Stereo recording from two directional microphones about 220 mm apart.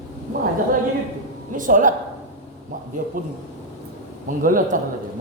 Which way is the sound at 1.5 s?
35° right (ahead or behind).